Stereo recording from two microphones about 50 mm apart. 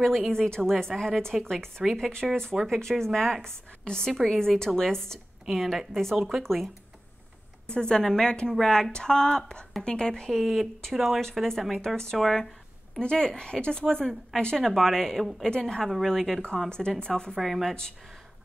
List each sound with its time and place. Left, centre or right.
0.0 s speech: centre
0.3 s a woman's voice: centre
4.1 s a woman's voice: centre
5.4 s a woman's voice: centre
7.7 s a woman's voice: centre
10.3 s a woman's voice: centre
13.0 s a woman's voice: centre
16.6 s a woman's voice: centre
17.4 s speech: centre